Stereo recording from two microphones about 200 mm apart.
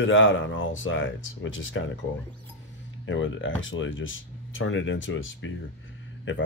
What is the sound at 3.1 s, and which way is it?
Speech, 70° left (ahead or behind).